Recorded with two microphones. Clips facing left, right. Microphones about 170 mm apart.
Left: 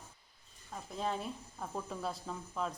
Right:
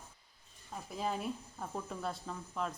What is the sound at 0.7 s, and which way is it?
Speech, 5° right (ahead or behind).